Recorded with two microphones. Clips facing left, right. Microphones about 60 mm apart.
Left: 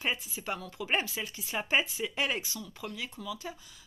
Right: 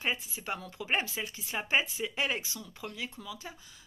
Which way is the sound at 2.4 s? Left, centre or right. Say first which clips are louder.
Left 2 dB; right.